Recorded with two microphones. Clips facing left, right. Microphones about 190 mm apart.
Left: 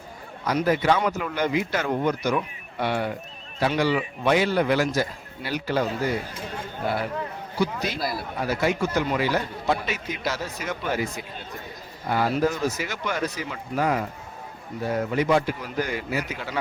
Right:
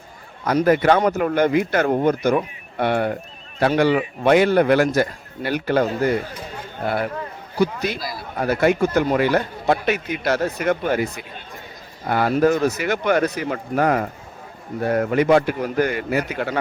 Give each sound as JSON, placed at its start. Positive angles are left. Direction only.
{"t": 0.6, "sound": "speech", "side_deg": -55}